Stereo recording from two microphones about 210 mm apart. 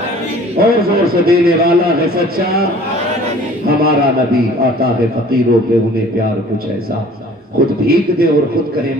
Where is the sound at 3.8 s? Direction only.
45° right (ahead or behind).